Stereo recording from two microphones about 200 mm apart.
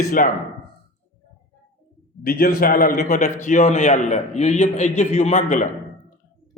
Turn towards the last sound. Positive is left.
turn(degrees=35)  # may be behind; listen again after turning